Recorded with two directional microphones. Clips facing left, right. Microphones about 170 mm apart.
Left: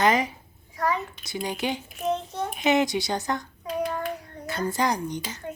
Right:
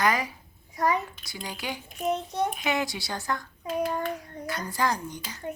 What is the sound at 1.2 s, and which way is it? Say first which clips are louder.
Speech: left 7 dB; 20° left (ahead or behind).